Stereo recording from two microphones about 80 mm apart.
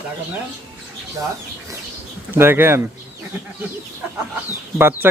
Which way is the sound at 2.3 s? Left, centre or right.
Right.